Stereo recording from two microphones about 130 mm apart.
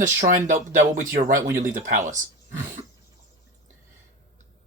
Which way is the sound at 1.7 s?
75° right (ahead or behind).